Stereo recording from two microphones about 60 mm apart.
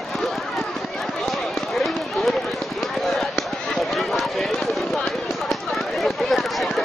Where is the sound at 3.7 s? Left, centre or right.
Centre.